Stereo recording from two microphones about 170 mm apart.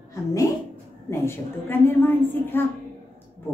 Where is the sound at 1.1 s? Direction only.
15° left (ahead or behind).